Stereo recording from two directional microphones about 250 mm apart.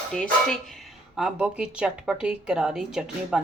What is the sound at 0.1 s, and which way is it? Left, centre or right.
A woman's voice, centre.